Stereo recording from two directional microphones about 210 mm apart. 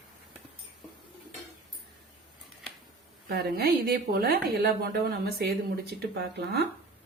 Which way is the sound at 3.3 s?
50° right (ahead or behind).